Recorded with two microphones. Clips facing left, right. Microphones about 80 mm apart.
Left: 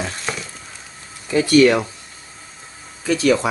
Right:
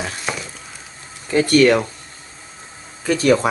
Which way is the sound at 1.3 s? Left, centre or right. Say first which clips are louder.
Even; right.